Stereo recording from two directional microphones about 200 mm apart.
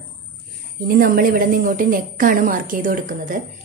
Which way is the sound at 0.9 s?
45° right (ahead or behind).